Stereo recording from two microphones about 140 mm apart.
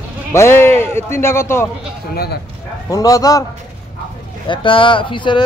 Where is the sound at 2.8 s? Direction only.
25° left (ahead or behind).